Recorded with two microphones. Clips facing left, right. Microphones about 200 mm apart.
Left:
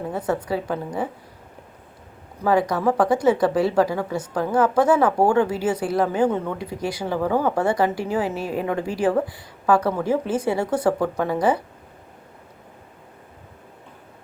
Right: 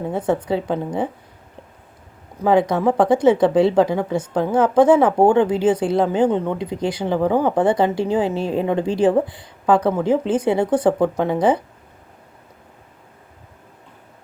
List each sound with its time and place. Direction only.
0.1 s speech: 20° right (ahead or behind)
2.4 s speech: 20° right (ahead or behind)